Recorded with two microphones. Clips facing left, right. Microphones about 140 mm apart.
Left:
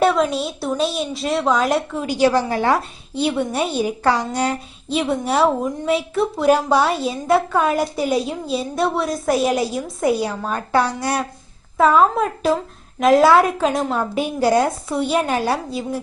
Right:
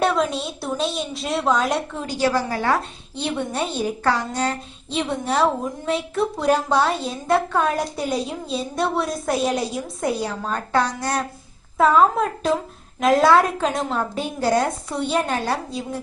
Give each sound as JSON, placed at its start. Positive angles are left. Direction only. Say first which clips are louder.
{"t": 0.0, "sound": "a woman's voice", "louder": "left 4 dB", "side_deg": 0}